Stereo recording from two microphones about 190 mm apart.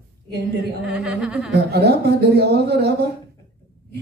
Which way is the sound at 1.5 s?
60° right (ahead or behind).